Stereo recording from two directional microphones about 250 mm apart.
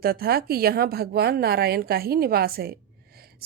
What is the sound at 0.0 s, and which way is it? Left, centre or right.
Speech, right.